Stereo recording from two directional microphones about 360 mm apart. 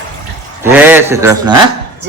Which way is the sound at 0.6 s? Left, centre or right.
Centre.